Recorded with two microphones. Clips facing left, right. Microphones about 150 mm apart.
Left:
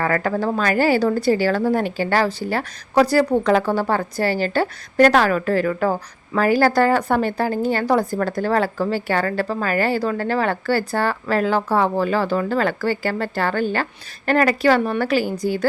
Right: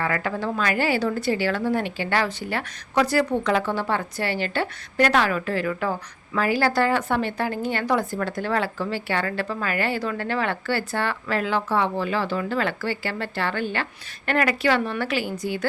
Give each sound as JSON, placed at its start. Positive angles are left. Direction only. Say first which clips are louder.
{"t": 0.0, "sound": "a woman's voice", "louder": "left 5 dB", "side_deg": 40}